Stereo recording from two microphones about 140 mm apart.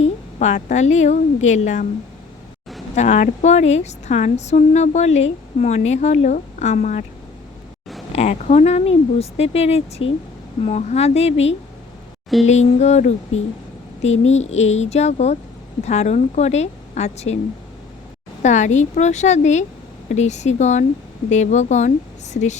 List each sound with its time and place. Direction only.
0.3 s a woman's voice: 55° left (ahead or behind)
2.9 s a woman's voice: 55° left (ahead or behind)
8.1 s speech: 50° left (ahead or behind)
12.5 s speech: 55° left (ahead or behind)
18.4 s a woman's voice: 60° left (ahead or behind)